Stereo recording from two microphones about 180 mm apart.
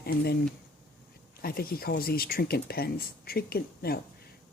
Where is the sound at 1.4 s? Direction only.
60° left (ahead or behind).